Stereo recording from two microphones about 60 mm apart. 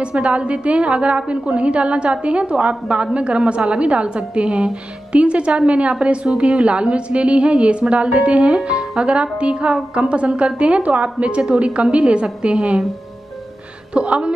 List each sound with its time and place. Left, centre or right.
0.0 s a woman's voice: centre
13.9 s a woman's voice: centre